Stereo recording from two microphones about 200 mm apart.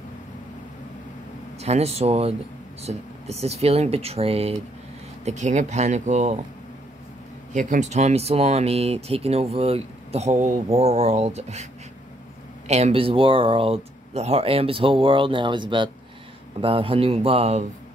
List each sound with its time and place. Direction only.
1.6 s speech: 30° right (ahead or behind)
7.5 s speech: 35° right (ahead or behind)
12.6 s speech: 35° right (ahead or behind)